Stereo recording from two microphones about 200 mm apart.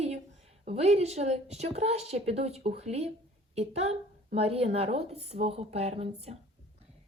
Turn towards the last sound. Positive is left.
turn(degrees=-30)  # may be behind; listen again after turning